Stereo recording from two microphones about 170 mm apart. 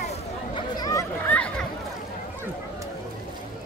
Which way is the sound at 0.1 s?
25° left (ahead or behind).